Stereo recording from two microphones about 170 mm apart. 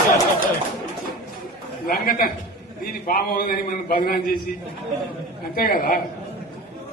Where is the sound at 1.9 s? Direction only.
60° left (ahead or behind).